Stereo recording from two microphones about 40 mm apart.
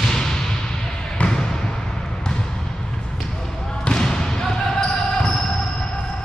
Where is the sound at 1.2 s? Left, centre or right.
Left.